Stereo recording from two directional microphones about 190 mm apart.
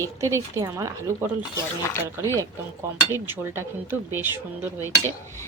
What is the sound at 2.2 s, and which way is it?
Speech, 15° right (ahead or behind).